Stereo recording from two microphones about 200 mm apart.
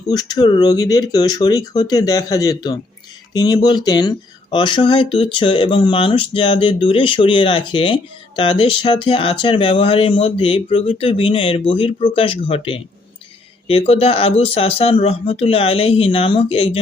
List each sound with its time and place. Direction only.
0.1 s speech: 20° left (ahead or behind)